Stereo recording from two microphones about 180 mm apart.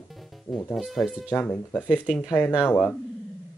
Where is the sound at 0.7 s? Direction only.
5° right (ahead or behind).